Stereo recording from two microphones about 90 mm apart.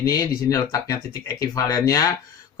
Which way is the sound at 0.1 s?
40° left (ahead or behind).